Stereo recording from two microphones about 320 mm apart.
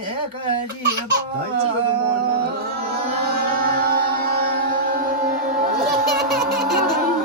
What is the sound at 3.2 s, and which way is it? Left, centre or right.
Music, right.